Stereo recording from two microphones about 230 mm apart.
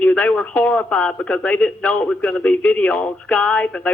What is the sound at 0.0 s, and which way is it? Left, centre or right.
Speech, centre.